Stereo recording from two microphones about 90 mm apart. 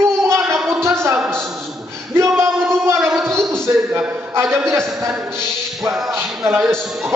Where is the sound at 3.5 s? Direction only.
25° right (ahead or behind).